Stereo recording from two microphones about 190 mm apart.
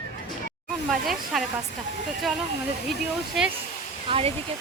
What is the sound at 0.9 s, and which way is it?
Speech, centre (ahead or behind).